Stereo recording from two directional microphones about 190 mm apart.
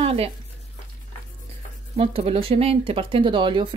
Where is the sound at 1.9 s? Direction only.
30° right (ahead or behind).